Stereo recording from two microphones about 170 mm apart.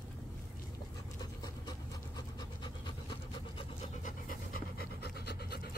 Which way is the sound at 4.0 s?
55° left (ahead or behind).